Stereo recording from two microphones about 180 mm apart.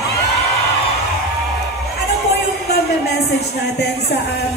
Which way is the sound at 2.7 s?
65° left (ahead or behind).